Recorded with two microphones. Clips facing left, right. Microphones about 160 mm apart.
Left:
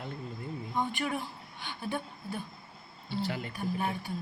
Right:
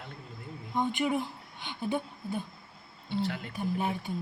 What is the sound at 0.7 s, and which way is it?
A woman's voice, 20° right (ahead or behind).